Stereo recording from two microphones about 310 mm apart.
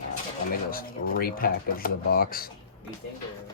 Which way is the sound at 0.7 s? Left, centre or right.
Left.